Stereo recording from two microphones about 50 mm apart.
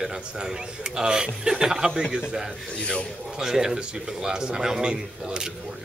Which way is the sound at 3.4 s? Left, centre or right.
Centre.